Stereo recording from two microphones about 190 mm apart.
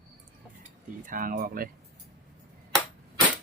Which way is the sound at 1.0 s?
45° right (ahead or behind).